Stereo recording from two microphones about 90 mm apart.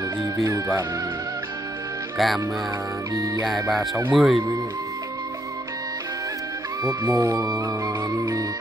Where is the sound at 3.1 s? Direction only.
40° right (ahead or behind).